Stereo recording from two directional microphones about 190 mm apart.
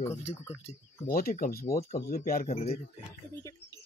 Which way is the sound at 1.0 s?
50° left (ahead or behind).